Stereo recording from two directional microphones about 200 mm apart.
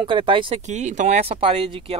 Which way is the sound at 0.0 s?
25° right (ahead or behind).